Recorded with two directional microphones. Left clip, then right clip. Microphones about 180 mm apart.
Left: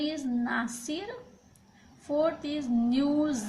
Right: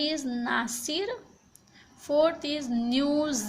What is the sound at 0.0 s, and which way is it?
A woman's voice, 50° right (ahead or behind).